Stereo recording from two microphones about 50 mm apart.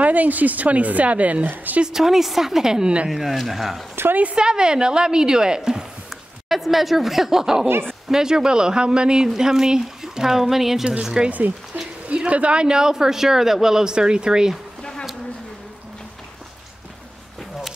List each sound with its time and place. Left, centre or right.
0.0 s speech: right
1.8 s speech: centre
4.1 s speech: right
4.4 s speech: centre
6.5 s speech: centre
11.2 s speech: right
14.8 s a sound: centre